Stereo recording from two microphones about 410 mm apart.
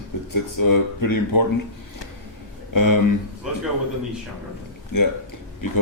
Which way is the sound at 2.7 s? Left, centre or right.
Left.